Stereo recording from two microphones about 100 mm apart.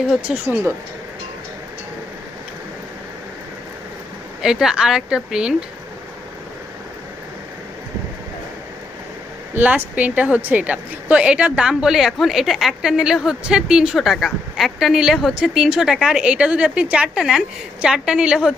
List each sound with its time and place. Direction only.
0.1 s a woman's voice: 10° right (ahead or behind)
4.4 s a woman's voice: 5° right (ahead or behind)
9.6 s a woman's voice: 15° right (ahead or behind)